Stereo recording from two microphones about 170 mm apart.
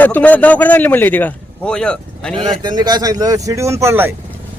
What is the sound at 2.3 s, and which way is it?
Speech, 30° right (ahead or behind).